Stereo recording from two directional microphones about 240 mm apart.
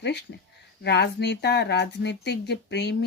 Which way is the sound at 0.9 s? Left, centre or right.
Left.